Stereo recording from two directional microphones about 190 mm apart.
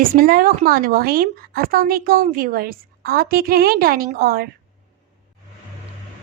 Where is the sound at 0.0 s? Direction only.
50° right (ahead or behind).